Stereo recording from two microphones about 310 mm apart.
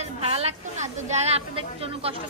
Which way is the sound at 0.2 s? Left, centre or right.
Centre.